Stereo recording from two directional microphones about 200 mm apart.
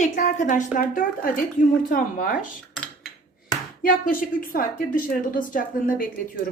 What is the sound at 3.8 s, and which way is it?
A woman's voice, 45° left (ahead or behind).